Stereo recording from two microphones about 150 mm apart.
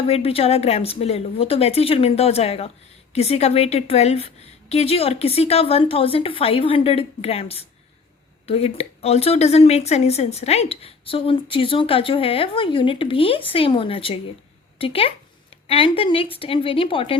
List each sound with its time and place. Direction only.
0.1 s speech: 40° left (ahead or behind)